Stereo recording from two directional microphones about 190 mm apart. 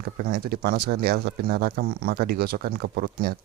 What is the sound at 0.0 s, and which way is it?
Speech, 50° right (ahead or behind).